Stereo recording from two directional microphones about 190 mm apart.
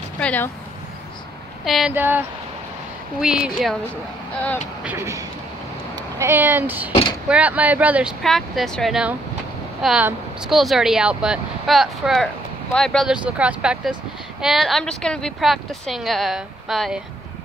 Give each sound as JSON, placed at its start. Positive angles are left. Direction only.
{"t": 0.2, "sound": "a sound", "side_deg": 10}
{"t": 1.6, "sound": "speech", "side_deg": 0}
{"t": 4.8, "sound": "speech", "side_deg": -15}
{"t": 6.9, "sound": "speech", "side_deg": 25}
{"t": 7.2, "sound": "speech", "side_deg": -5}